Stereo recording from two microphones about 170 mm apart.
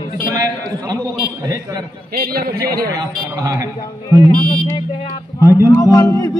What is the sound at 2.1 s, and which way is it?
Speech, 65° right (ahead or behind).